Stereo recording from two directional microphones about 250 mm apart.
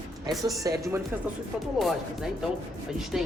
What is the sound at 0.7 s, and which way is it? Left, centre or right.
Speech, centre.